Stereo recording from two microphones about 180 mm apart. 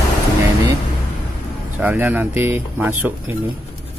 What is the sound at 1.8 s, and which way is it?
Speech, 10° right (ahead or behind).